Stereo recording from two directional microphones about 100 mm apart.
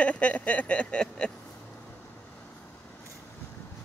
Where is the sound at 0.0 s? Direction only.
15° left (ahead or behind).